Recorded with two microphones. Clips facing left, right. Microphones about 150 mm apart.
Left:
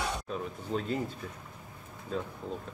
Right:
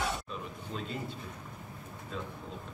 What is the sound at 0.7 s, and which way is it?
Speech, 40° left (ahead or behind).